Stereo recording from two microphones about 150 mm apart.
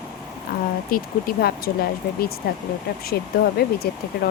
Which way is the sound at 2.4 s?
90° left.